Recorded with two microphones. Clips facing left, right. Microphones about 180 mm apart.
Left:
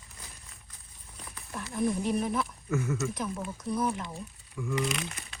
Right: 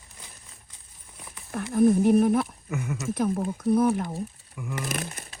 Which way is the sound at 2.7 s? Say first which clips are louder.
Left 1 dB; 15° right (ahead or behind).